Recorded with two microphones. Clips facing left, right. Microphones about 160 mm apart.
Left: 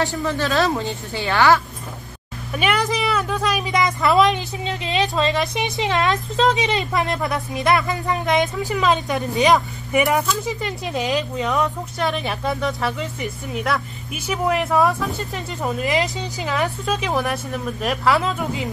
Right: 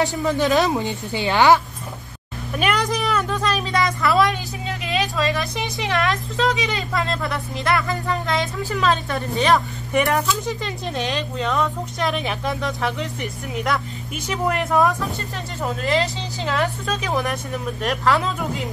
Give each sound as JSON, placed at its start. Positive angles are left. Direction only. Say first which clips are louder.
{"t": 0.0, "sound": "a woman's voice", "louder": "right 2 dB", "side_deg": -15}
{"t": 2.5, "sound": "a woman's voice", "louder": "left 1 dB", "side_deg": 5}
{"t": 10.0, "sound": "speech", "louder": "left 1 dB", "side_deg": 0}